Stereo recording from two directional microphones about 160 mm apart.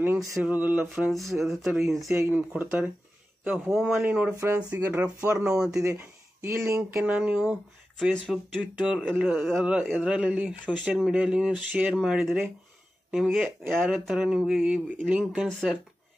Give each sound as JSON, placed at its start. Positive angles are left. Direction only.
{"t": 0.0, "sound": "speech", "side_deg": -15}
{"t": 2.0, "sound": "speech", "side_deg": -15}
{"t": 3.7, "sound": "speech", "side_deg": 0}
{"t": 4.0, "sound": "speech", "side_deg": -10}
{"t": 5.9, "sound": "speech", "side_deg": -15}
{"t": 7.0, "sound": "speech", "side_deg": -5}
{"t": 8.0, "sound": "speech", "side_deg": 0}
{"t": 9.6, "sound": "speech", "side_deg": 0}